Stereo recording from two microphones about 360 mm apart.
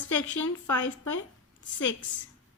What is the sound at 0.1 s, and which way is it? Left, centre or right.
Speech, left.